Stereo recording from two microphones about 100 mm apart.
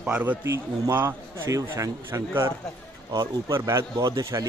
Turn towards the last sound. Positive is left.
turn(degrees=-35)  # may be behind; listen again after turning